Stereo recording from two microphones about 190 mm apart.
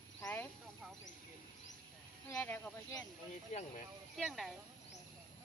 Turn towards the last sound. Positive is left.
turn(degrees=0)  # may be behind; listen again after turning